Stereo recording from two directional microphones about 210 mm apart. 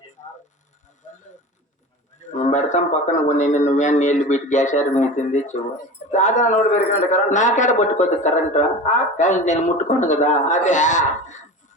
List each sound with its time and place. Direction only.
2.2 s a woman's voice: 35° left (ahead or behind)